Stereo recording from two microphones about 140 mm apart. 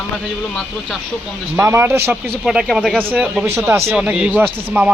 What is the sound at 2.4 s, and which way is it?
Speech, centre (ahead or behind).